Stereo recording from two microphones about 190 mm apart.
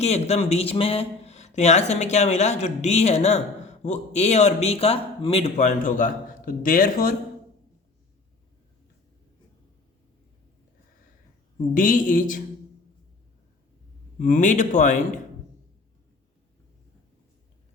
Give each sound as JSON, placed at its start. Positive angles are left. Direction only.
{"t": 0.0, "sound": "speech", "side_deg": 35}
{"t": 11.7, "sound": "a woman's voice", "side_deg": 45}
{"t": 14.2, "sound": "speech", "side_deg": 45}